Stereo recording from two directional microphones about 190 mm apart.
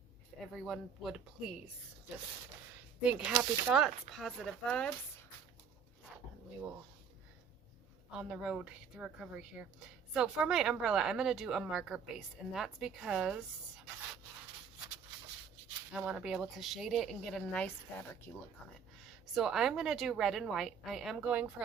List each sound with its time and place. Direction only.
0.3 s a woman's voice: centre (ahead or behind)
3.0 s a woman's voice: 5° right (ahead or behind)
8.1 s a woman's voice: 5° right (ahead or behind)
15.9 s a woman's voice: 5° right (ahead or behind)
19.0 s a woman's voice: centre (ahead or behind)